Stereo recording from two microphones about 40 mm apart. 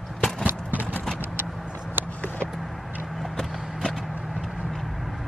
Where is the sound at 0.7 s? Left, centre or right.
Right.